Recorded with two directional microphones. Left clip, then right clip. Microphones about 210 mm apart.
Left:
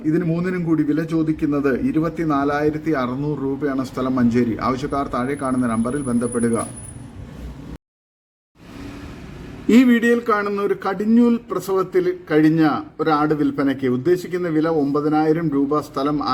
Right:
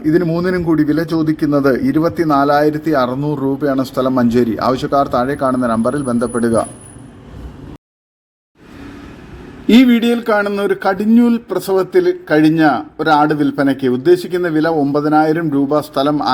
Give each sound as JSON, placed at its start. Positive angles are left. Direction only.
{"t": 0.0, "sound": "speech", "side_deg": -15}
{"t": 9.6, "sound": "speech", "side_deg": -10}